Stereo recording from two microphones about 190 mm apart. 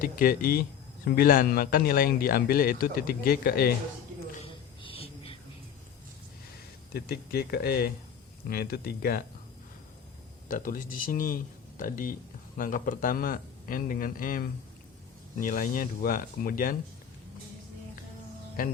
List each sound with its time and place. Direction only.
0.0 s a man's voice: 50° left (ahead or behind)
4.4 s a sound: 30° left (ahead or behind)
6.9 s a man's voice: 55° left (ahead or behind)
10.5 s a man's voice: 45° left (ahead or behind)
18.6 s a man's voice: 45° left (ahead or behind)